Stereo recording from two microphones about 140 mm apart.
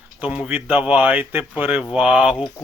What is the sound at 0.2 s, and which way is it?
Speech, 10° right (ahead or behind).